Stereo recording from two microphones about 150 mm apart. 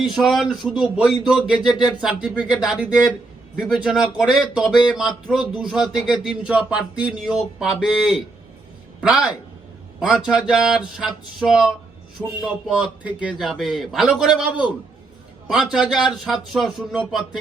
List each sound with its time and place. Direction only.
0.0 s speech: centre (ahead or behind)
1.5 s speech: 30° left (ahead or behind)
2.0 s speech: 5° right (ahead or behind)